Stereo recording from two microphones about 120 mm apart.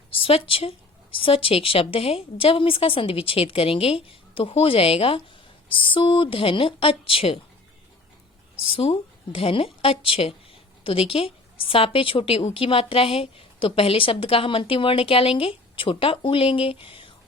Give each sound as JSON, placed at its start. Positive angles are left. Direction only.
{"t": 0.1, "sound": "a woman's voice", "side_deg": 50}
{"t": 8.6, "sound": "a woman's voice", "side_deg": 50}